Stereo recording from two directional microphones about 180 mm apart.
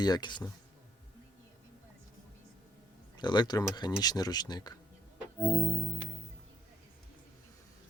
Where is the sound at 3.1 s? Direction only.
25° left (ahead or behind).